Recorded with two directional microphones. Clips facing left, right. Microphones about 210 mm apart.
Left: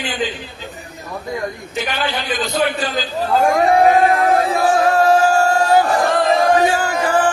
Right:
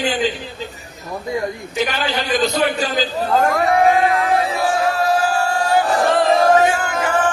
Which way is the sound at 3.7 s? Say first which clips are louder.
Left 3 dB; 40° left (ahead or behind).